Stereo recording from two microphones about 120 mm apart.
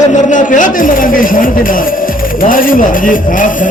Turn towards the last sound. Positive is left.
turn(degrees=90)